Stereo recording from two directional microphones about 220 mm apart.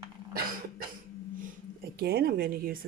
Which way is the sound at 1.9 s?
45° right (ahead or behind).